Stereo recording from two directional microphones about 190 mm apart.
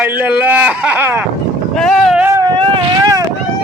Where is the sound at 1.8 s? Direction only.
Centre (ahead or behind).